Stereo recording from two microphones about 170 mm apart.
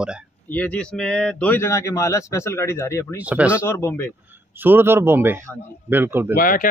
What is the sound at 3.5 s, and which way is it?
Speech, 15° left (ahead or behind).